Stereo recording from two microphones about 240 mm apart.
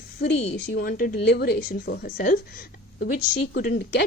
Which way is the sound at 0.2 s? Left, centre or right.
Left.